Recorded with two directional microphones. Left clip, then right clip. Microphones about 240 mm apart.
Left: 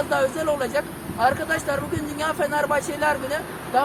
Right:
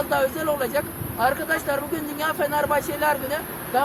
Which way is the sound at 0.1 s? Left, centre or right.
Centre.